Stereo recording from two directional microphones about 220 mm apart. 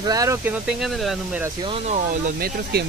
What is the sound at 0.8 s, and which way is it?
Speech, centre (ahead or behind).